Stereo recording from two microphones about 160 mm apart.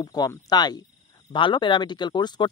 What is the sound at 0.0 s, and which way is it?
Speech, 25° left (ahead or behind).